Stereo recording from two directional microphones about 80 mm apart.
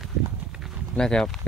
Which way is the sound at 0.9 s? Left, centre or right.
Centre.